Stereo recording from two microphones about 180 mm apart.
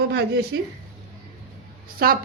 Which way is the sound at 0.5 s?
75° right (ahead or behind).